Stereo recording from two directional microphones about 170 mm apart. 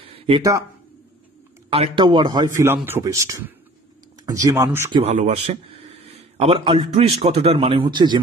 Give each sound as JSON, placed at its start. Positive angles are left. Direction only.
{"t": 0.0, "sound": "a sound", "side_deg": -30}
{"t": 1.7, "sound": "a man's voice", "side_deg": -30}
{"t": 4.9, "sound": "speech", "side_deg": -40}